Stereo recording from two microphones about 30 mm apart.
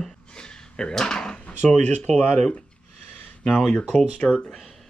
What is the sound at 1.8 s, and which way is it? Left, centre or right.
Speech, left.